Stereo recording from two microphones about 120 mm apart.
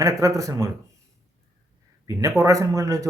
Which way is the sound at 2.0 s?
30° right (ahead or behind).